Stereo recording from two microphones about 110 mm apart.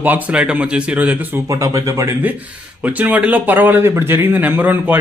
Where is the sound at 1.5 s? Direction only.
30° right (ahead or behind).